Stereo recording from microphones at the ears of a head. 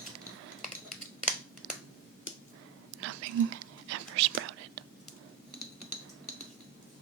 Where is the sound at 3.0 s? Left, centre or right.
Right.